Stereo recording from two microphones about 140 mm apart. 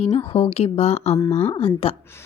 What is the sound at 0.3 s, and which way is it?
A woman's voice, 45° left (ahead or behind).